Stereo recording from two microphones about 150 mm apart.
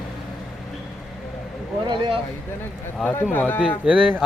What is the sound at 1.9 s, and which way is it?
Speech, 30° right (ahead or behind).